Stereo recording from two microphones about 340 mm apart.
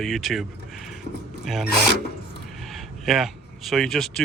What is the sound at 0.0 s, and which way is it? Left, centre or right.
Speech, centre.